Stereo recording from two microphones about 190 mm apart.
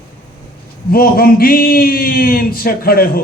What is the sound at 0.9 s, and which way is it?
A man's voice, 50° left (ahead or behind).